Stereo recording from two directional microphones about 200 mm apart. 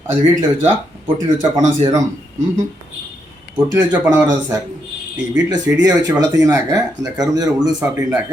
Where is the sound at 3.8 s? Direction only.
10° right (ahead or behind).